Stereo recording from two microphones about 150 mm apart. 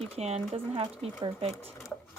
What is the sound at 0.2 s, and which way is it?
Speech, 45° right (ahead or behind).